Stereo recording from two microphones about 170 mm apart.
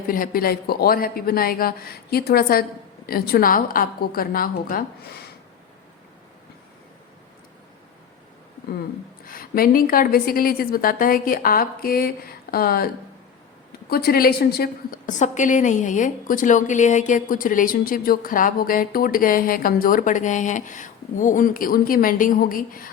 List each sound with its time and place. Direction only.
0.1 s a woman's voice: 60° left (ahead or behind)
9.2 s a woman's voice: 60° left (ahead or behind)
13.9 s a woman's voice: 60° left (ahead or behind)